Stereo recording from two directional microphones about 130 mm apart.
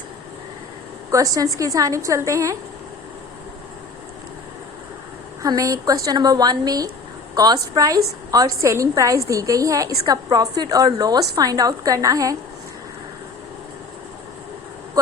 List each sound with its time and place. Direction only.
1.1 s a woman's voice: 25° right (ahead or behind)
5.4 s a woman's voice: 25° right (ahead or behind)